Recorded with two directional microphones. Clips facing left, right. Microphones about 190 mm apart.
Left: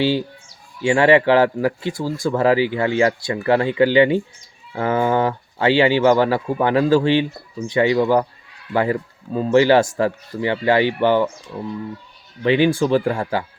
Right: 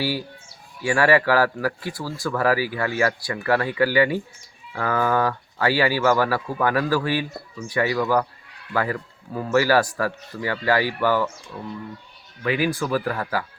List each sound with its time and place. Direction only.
0.0 s speech: 25° left (ahead or behind)